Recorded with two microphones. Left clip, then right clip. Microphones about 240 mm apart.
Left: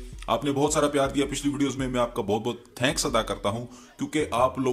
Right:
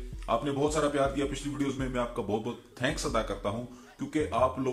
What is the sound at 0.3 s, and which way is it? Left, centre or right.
Speech, left.